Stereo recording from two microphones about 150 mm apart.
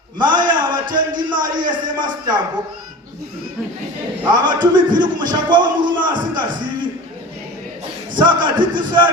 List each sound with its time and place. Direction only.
0.2 s a sound: 30° right (ahead or behind)
4.3 s a man's voice: 30° right (ahead or behind)
8.1 s a man's voice: 30° right (ahead or behind)